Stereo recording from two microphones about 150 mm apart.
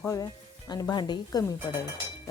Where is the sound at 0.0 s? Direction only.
20° left (ahead or behind).